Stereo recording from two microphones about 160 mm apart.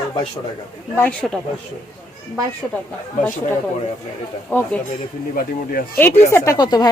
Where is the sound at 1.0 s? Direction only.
5° left (ahead or behind).